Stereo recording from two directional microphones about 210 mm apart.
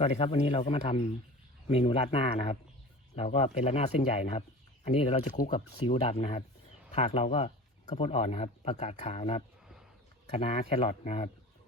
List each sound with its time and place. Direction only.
0.0 s speech: 30° left (ahead or behind)